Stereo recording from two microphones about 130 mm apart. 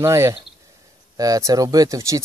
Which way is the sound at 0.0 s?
20° right (ahead or behind).